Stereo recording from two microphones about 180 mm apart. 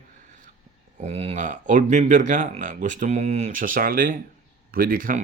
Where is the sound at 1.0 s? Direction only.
35° right (ahead or behind).